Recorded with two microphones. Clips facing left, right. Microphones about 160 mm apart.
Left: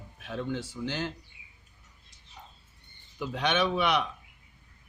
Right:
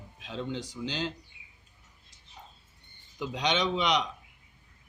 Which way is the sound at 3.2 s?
15° right (ahead or behind).